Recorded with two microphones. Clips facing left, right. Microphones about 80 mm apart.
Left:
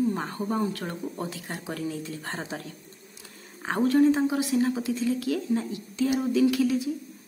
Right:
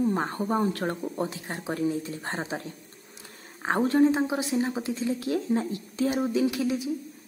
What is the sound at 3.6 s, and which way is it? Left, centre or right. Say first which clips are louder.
Speech: even; right.